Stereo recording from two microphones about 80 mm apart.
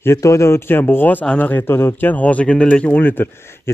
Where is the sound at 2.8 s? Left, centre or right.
Left.